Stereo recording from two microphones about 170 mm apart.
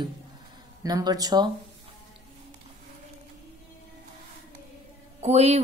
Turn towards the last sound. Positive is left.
turn(degrees=-40)  # may be behind; listen again after turning